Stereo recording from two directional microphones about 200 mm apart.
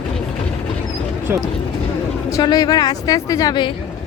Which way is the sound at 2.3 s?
20° left (ahead or behind).